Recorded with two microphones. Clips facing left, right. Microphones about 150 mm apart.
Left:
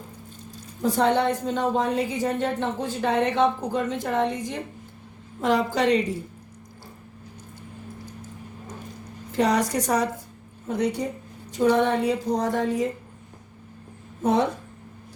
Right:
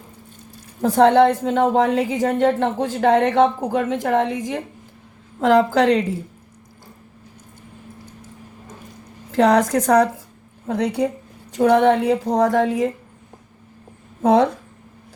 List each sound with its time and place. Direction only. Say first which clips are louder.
0.8 s a woman's voice: right 8 dB; 90° right
9.3 s a woman's voice: right 7 dB; 90° right
10.7 s a woman's voice: right 5 dB; 90° right
11.5 s a woman's voice: right 6 dB; 65° right (ahead or behind); by 12.9 s 90° right
14.2 s a woman's voice: right 6 dB; 90° right